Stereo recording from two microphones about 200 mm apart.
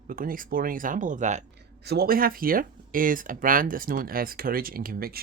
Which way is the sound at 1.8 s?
50° right (ahead or behind).